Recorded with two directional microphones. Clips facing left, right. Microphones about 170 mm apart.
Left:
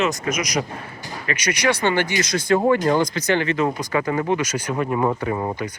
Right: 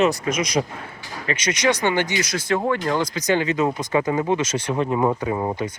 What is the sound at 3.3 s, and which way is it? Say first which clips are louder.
Speech: right 3 dB; 15° right (ahead or behind).